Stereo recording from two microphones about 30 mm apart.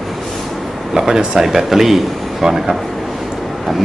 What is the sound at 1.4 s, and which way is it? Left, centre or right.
Speech, centre.